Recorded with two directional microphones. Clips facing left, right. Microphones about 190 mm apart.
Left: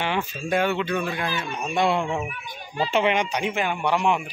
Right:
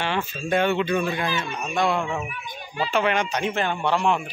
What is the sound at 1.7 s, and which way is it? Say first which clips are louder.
Speech: left 1 dB; 25° left (ahead or behind).